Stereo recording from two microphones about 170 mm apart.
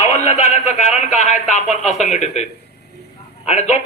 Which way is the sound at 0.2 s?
40° left (ahead or behind).